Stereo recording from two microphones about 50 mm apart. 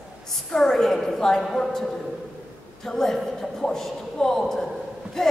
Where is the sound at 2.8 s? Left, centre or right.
Centre.